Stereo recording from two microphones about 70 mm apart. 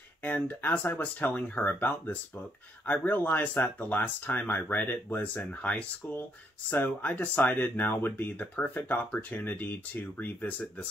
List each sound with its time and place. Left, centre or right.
0.2 s speech: left